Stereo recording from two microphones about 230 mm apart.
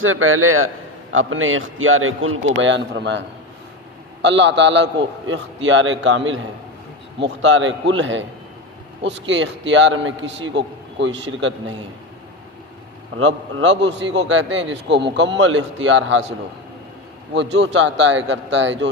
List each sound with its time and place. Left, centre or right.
0.0 s a man's voice: right
13.1 s a man's voice: right
17.3 s a man's voice: right